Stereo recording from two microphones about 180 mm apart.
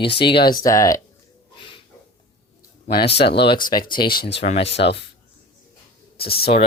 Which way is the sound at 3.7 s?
25° left (ahead or behind).